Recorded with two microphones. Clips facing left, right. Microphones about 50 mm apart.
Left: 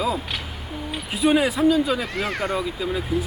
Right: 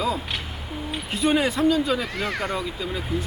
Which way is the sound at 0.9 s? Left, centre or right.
Centre.